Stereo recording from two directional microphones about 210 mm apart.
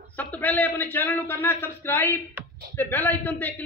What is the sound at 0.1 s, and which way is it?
A man's voice, 5° left (ahead or behind).